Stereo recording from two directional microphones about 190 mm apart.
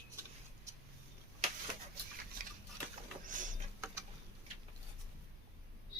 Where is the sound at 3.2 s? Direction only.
45° right (ahead or behind).